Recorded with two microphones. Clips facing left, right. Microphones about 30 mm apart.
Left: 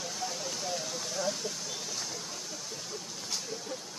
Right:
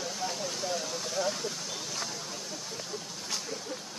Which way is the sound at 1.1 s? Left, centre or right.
Right.